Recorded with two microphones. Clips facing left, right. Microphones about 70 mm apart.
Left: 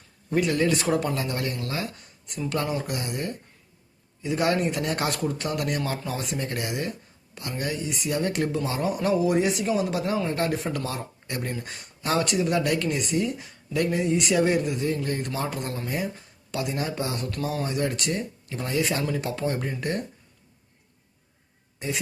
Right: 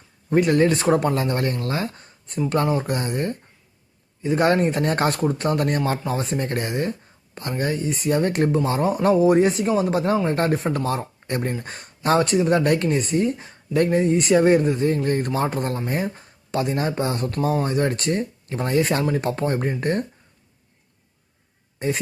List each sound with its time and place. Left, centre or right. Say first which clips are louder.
0.3 s speech: right 5 dB; right
21.8 s speech: right 7 dB; right